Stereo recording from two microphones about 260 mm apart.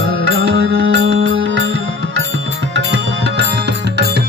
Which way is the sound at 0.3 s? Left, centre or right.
Right.